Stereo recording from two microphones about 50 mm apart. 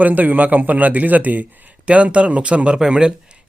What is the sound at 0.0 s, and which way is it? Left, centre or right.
Speech, right.